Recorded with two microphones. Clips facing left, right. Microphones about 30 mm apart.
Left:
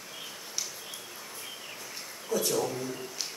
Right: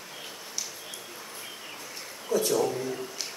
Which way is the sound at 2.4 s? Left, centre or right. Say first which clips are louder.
Right 4 dB; centre.